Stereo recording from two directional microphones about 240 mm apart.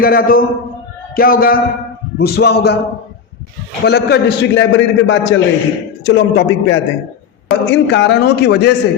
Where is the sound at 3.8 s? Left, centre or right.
Left.